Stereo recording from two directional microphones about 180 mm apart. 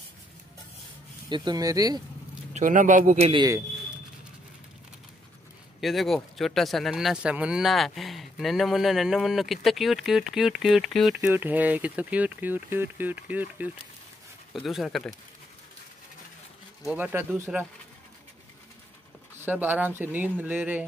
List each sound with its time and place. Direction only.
1.3 s speech: 25° right (ahead or behind)
2.5 s speech: 45° right (ahead or behind)
3.3 s speech: 25° right (ahead or behind)
5.8 s speech: centre (ahead or behind)
11.1 s speech: 10° right (ahead or behind)
16.9 s speech: 10° right (ahead or behind)
19.3 s speech: 10° right (ahead or behind)